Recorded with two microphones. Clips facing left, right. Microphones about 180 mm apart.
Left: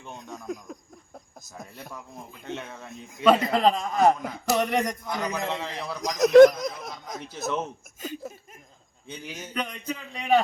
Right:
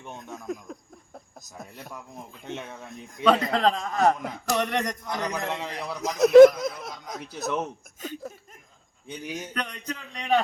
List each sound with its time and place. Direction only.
0.2 s speech: centre (ahead or behind)
3.2 s a man's voice: 5° left (ahead or behind)
5.5 s a man's voice: 15° right (ahead or behind)
6.0 s a man's voice: 5° right (ahead or behind)
7.3 s a man's voice: 15° right (ahead or behind)
8.0 s a man's voice: 5° left (ahead or behind)
9.0 s a man's voice: 15° right (ahead or behind)
9.5 s a man's voice: 5° left (ahead or behind)